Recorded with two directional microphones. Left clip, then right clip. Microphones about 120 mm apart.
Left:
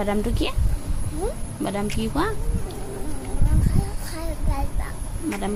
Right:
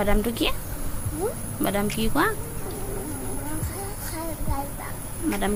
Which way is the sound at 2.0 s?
20° left (ahead or behind).